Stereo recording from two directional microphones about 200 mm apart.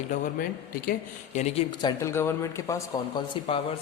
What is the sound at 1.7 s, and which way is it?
Speech, 20° left (ahead or behind).